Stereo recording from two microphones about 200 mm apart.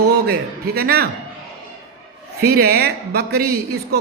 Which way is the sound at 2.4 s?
50° right (ahead or behind).